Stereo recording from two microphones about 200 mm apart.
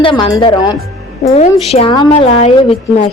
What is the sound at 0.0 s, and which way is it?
A woman's voice, 25° left (ahead or behind).